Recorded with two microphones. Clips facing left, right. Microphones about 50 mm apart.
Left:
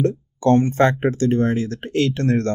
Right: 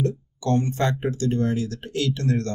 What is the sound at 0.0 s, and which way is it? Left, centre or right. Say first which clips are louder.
Speech: left 7 dB; left.